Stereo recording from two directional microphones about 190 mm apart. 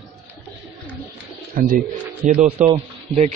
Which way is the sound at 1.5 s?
50° right (ahead or behind).